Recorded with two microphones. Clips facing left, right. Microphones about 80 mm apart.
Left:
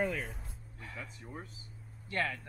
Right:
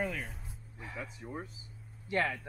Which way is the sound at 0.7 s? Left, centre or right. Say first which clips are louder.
Right 3 dB; centre.